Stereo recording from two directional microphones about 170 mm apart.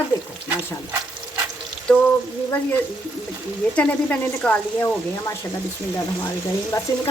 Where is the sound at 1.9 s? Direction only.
5° left (ahead or behind).